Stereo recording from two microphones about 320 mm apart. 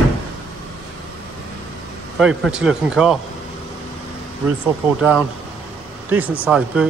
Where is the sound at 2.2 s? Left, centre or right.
Centre.